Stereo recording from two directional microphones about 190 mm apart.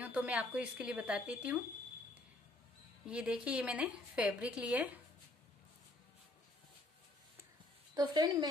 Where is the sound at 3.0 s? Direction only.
5° right (ahead or behind).